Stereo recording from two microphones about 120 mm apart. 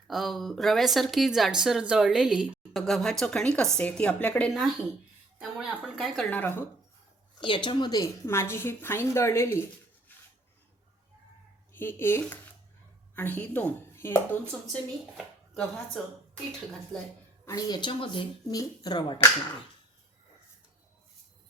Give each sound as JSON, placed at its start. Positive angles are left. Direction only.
{"t": 0.1, "sound": "speech", "side_deg": 0}
{"t": 6.3, "sound": "speech", "side_deg": 15}
{"t": 7.4, "sound": "speech", "side_deg": 45}
{"t": 8.3, "sound": "a woman's voice", "side_deg": 20}
{"t": 11.7, "sound": "a woman's voice", "side_deg": 20}
{"t": 17.4, "sound": "speech", "side_deg": 35}
{"t": 18.4, "sound": "speech", "side_deg": 30}